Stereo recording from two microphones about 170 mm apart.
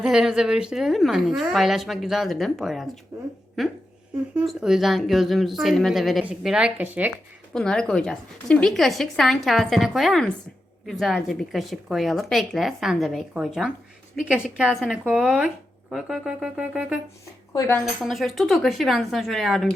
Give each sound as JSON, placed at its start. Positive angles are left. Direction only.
{"t": 0.0, "sound": "a woman's voice", "side_deg": -5}
{"t": 7.5, "sound": "a woman's voice", "side_deg": 5}
{"t": 17.5, "sound": "speech", "side_deg": 15}
{"t": 18.0, "sound": "a woman's voice", "side_deg": 0}